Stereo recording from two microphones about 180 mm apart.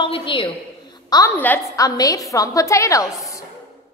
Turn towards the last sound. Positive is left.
turn(degrees=15)  # may be behind; listen again after turning